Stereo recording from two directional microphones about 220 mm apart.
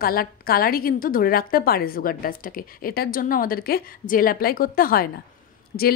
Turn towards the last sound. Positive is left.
turn(degrees=35)  # may be behind; listen again after turning